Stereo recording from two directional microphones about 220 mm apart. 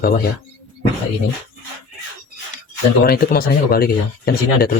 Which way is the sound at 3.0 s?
45° left (ahead or behind).